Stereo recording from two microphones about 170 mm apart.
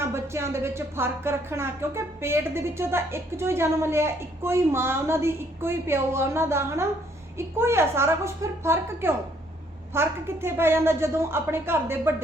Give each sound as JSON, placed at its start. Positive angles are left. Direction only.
{"t": 0.0, "sound": "speech", "side_deg": -15}